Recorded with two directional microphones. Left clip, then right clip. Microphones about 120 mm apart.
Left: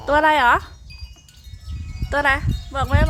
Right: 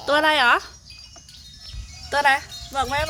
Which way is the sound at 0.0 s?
15° left (ahead or behind).